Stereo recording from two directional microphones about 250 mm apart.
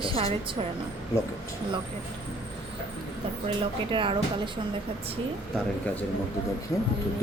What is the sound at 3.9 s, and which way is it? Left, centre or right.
Speech, centre.